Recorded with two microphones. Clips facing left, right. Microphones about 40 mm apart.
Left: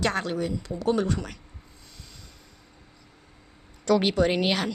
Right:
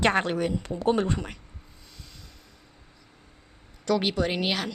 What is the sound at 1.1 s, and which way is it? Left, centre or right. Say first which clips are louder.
Speech: even; right.